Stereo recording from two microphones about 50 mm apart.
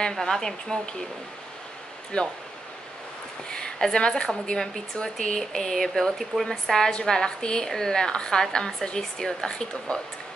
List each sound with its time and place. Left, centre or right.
0.1 s a woman's voice: centre
2.1 s speech: left
3.4 s a woman's voice: centre